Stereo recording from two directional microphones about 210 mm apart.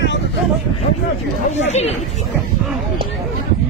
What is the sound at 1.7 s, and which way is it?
Speech, 30° left (ahead or behind).